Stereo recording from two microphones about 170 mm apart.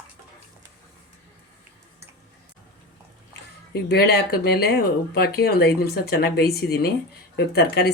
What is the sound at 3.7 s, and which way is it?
Speech, 70° left (ahead or behind).